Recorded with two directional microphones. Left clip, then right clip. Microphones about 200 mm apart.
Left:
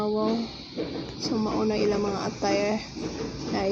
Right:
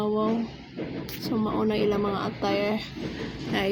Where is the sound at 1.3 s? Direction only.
15° right (ahead or behind).